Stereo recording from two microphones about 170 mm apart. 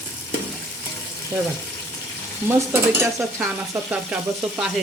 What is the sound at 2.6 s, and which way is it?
Speech, 15° right (ahead or behind).